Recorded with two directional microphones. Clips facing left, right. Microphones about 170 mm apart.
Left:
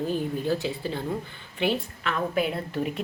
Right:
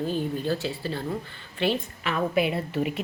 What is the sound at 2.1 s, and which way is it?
Speech, 5° right (ahead or behind).